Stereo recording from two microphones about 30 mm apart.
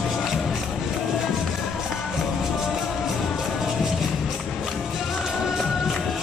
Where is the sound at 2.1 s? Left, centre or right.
Centre.